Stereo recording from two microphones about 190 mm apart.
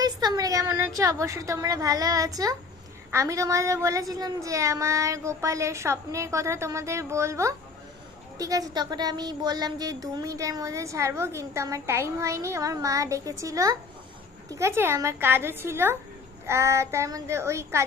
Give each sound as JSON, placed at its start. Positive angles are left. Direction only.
{"t": 0.0, "sound": "a woman's voice", "side_deg": -20}